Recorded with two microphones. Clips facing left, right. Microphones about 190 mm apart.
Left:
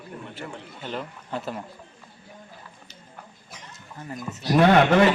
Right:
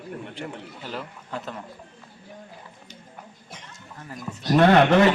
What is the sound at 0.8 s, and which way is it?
Speech, 5° right (ahead or behind).